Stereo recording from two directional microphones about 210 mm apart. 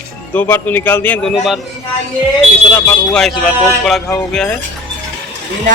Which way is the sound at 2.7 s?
10° left (ahead or behind).